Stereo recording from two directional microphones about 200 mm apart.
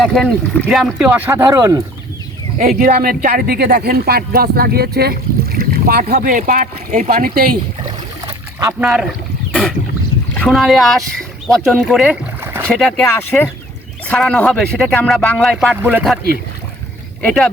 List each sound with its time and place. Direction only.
0.0 s speech: centre (ahead or behind); by 1.8 s 15° right (ahead or behind)
2.6 s speech: 45° right (ahead or behind)
8.8 s speech: 5° right (ahead or behind)
10.3 s speech: centre (ahead or behind)
12.6 s speech: centre (ahead or behind)
13.1 s speech: 10° left (ahead or behind); by 16.1 s 10° right (ahead or behind)
17.2 s speech: centre (ahead or behind)